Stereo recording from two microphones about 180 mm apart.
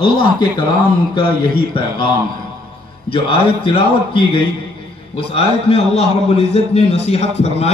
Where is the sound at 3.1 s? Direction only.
30° left (ahead or behind).